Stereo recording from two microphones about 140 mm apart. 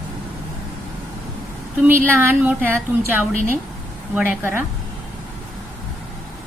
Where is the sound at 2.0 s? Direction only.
15° right (ahead or behind).